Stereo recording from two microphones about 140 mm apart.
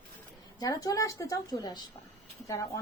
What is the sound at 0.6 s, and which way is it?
A woman's voice, 25° left (ahead or behind).